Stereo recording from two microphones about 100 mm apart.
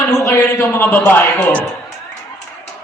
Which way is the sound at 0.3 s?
25° left (ahead or behind).